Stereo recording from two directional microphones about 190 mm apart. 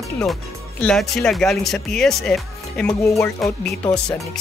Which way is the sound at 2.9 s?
15° left (ahead or behind).